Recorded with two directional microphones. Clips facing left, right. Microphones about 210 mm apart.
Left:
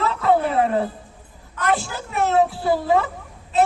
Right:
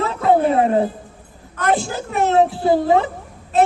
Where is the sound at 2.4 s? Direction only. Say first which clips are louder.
Right 4 dB; 20° right (ahead or behind).